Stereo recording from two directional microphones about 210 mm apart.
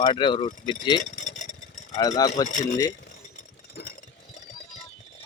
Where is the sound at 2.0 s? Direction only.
15° left (ahead or behind).